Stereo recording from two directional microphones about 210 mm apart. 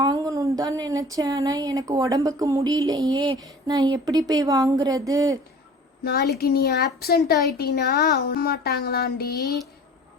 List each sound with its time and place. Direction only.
0.0 s speech: 15° right (ahead or behind)
6.1 s speech: 45° left (ahead or behind)